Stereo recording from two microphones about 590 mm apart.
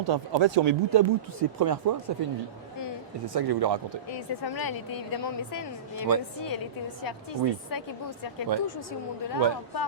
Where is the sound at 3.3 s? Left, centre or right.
Right.